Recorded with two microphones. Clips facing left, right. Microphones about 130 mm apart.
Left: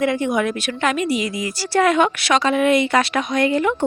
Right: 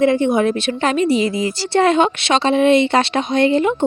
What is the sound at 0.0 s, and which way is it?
A woman's voice, 30° right (ahead or behind).